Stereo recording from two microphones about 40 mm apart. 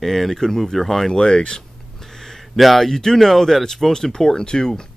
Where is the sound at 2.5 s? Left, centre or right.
Centre.